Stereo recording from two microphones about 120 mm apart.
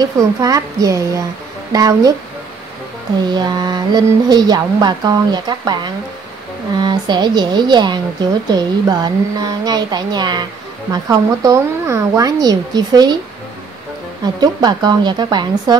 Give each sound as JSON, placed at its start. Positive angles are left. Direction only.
{"t": 0.0, "sound": "speech", "side_deg": -30}
{"t": 3.3, "sound": "speech", "side_deg": -35}
{"t": 6.8, "sound": "speech", "side_deg": -40}
{"t": 14.2, "sound": "speech", "side_deg": -35}